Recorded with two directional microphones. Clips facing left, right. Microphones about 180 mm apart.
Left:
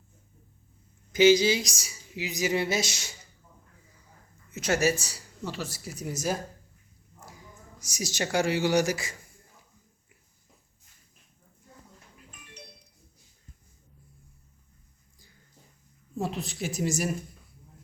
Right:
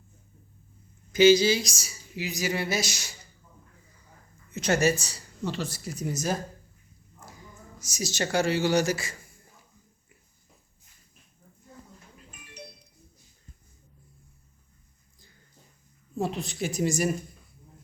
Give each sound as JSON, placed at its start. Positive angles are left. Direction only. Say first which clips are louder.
{"t": 1.1, "sound": "speech", "louder": "right 1 dB", "side_deg": 20}
{"t": 4.5, "sound": "speech", "louder": "right 2 dB", "side_deg": 5}
{"t": 16.1, "sound": "a woman's voice", "louder": "right 2 dB", "side_deg": 0}